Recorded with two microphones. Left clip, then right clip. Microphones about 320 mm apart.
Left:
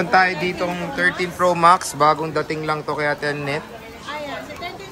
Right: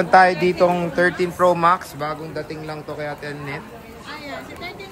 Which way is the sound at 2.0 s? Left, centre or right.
Centre.